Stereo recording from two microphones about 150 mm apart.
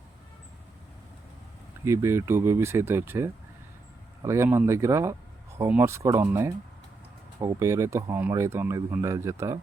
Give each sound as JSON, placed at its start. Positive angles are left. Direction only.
{"t": 1.8, "sound": "speech", "side_deg": -20}